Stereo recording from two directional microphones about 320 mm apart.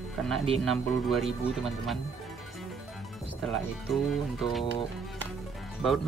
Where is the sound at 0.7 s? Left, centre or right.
Centre.